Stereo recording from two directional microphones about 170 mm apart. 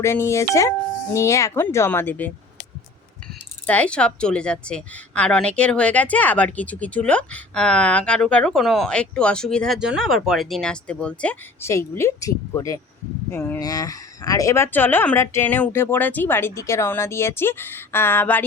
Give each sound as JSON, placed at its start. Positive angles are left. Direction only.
{"t": 0.0, "sound": "speech", "side_deg": 15}
{"t": 3.7, "sound": "a woman's voice", "side_deg": 5}